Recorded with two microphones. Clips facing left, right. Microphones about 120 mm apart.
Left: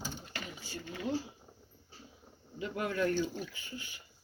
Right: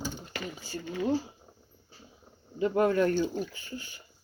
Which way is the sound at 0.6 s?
35° right (ahead or behind).